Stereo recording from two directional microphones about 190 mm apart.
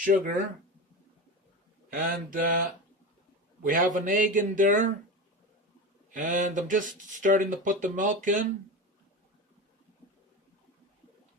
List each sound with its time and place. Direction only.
0.0 s speech: 45° right (ahead or behind)
1.9 s speech: 45° right (ahead or behind)
6.1 s speech: 45° right (ahead or behind)